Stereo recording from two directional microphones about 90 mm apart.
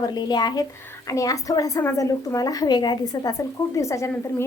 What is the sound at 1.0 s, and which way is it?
A woman's voice, 40° left (ahead or behind).